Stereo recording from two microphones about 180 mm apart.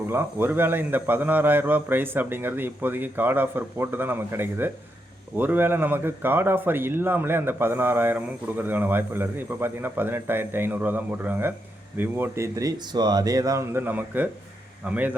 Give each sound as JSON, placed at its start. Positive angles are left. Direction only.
{"t": 0.1, "sound": "speech", "side_deg": -10}